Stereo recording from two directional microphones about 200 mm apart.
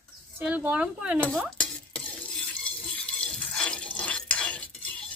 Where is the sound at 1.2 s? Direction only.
5° left (ahead or behind).